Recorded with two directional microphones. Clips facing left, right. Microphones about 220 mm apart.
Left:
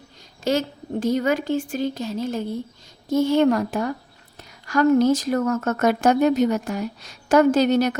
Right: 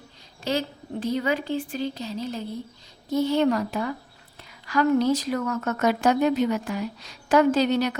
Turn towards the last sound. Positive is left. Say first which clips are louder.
# left 4 dB
turn(degrees=45)  # may be behind; listen again after turning